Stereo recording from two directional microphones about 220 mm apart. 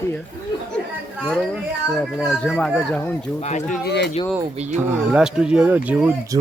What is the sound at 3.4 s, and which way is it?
Speech, 30° left (ahead or behind).